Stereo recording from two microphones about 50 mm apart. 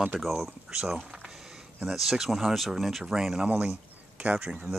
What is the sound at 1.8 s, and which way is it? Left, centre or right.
Speech, centre.